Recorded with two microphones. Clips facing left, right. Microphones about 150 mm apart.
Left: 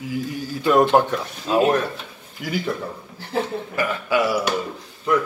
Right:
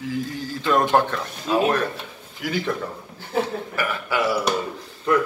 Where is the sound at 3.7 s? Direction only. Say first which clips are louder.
Left 6 dB; 20° left (ahead or behind).